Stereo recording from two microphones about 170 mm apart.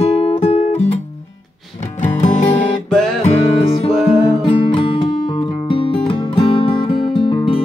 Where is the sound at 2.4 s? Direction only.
25° left (ahead or behind).